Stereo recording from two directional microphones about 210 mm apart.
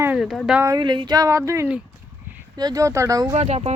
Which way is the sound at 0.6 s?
20° right (ahead or behind).